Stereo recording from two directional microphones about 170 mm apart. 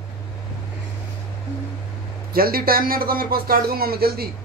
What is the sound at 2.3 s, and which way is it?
Speech, 60° right (ahead or behind).